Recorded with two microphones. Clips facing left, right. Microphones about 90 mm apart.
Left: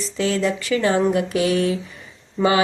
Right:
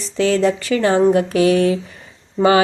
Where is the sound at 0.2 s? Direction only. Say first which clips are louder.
Right 5 dB; 35° right (ahead or behind).